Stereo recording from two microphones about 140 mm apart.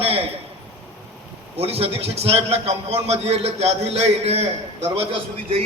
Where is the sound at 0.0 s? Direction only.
45° right (ahead or behind).